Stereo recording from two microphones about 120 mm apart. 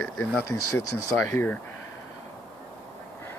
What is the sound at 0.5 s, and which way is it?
Speech, 25° left (ahead or behind).